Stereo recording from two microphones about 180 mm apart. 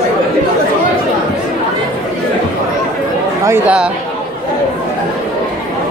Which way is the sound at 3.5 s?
5° right (ahead or behind).